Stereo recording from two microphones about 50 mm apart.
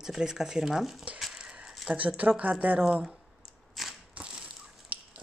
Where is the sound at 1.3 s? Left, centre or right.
Centre.